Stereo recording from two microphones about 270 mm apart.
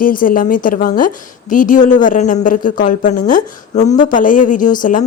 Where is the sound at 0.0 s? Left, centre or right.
Left.